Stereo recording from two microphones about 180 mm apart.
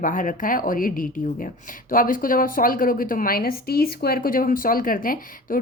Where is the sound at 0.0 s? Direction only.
45° left (ahead or behind).